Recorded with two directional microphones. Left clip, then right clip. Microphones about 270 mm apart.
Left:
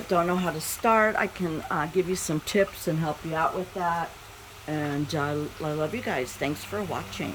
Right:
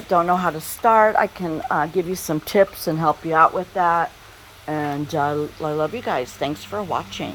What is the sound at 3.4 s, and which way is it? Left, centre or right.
Speech, right.